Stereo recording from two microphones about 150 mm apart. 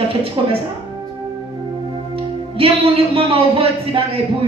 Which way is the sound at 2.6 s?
40° right (ahead or behind).